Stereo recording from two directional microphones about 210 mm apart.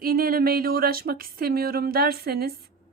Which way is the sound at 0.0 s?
45° right (ahead or behind).